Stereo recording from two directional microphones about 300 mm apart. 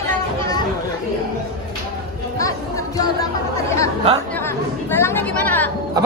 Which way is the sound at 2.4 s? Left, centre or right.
Centre.